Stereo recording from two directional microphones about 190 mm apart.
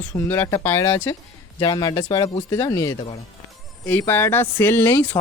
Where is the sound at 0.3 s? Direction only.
15° left (ahead or behind).